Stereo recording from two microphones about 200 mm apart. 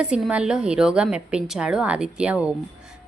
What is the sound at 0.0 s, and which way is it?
A woman's voice, 5° right (ahead or behind).